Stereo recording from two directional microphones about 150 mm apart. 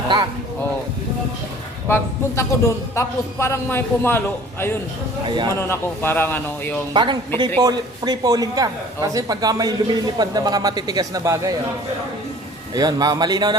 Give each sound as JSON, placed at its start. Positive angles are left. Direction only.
{"t": 1.9, "sound": "a man's voice", "side_deg": 20}
{"t": 5.2, "sound": "speech", "side_deg": -30}
{"t": 5.5, "sound": "a man's voice", "side_deg": 15}
{"t": 6.9, "sound": "a man's voice", "side_deg": -30}
{"t": 12.7, "sound": "a man's voice", "side_deg": -25}